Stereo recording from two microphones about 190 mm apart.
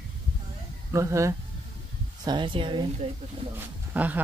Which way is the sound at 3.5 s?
10° right (ahead or behind).